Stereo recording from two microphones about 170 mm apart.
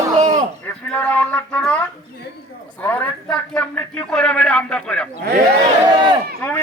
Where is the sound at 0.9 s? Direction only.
10° left (ahead or behind).